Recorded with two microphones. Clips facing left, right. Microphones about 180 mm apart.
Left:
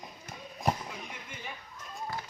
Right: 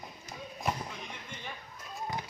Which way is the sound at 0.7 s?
40° left (ahead or behind).